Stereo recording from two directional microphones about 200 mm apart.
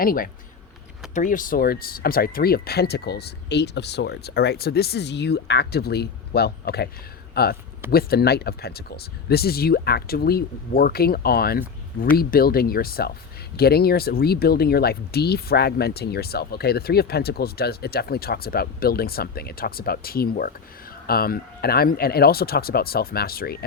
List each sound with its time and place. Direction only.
0.0 s speech: 45° left (ahead or behind)